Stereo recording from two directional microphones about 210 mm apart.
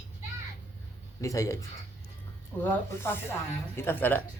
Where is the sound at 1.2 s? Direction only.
15° left (ahead or behind).